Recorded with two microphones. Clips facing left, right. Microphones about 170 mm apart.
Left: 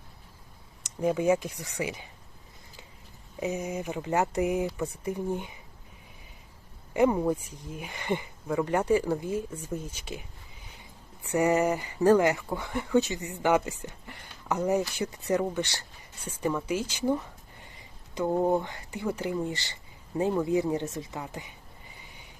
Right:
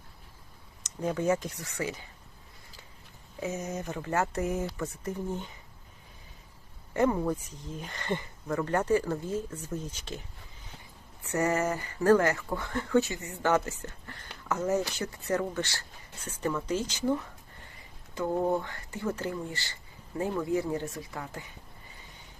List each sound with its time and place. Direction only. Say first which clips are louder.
0.8 s speech: left 4 dB; 10° left (ahead or behind)
3.4 s speech: left 3 dB; 15° left (ahead or behind)
6.9 s speech: left 3 dB; 15° left (ahead or behind)